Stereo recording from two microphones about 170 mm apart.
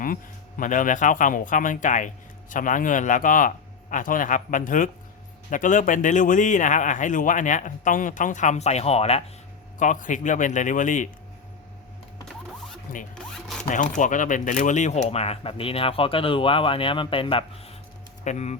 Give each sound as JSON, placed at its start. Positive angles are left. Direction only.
{"t": 0.0, "sound": "speech", "side_deg": 55}
{"t": 9.7, "sound": "speech", "side_deg": 50}
{"t": 13.1, "sound": "speech", "side_deg": 5}
{"t": 13.7, "sound": "speech", "side_deg": 50}
{"t": 18.3, "sound": "speech", "side_deg": 45}